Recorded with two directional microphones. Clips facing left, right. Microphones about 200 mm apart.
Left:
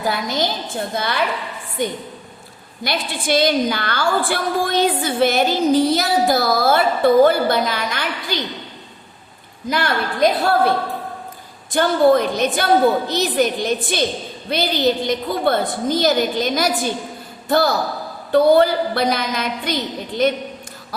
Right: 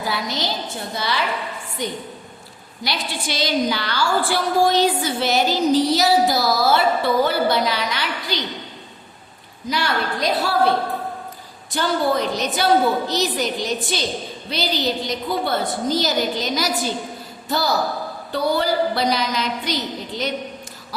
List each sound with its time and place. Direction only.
0.1 s a woman's voice: 50° left (ahead or behind)
9.6 s a woman's voice: 55° left (ahead or behind)
11.7 s a woman's voice: 55° left (ahead or behind)